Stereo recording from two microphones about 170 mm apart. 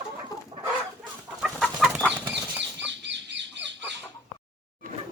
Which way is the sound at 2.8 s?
90° right.